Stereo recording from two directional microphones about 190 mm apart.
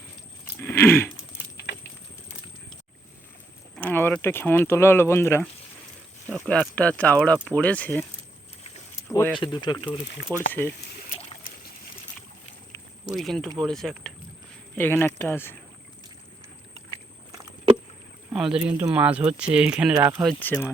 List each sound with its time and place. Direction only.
0.6 s speech: 10° left (ahead or behind)
3.8 s speech: 10° left (ahead or behind)
6.5 s speech: 5° left (ahead or behind)
9.0 s speech: 15° left (ahead or behind)
10.3 s speech: 15° right (ahead or behind)
13.1 s speech: centre (ahead or behind)
18.3 s speech: 5° right (ahead or behind)
20.4 s speech: 10° left (ahead or behind)